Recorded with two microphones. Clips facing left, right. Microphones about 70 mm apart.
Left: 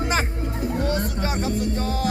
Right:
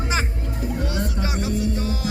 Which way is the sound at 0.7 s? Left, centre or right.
Left.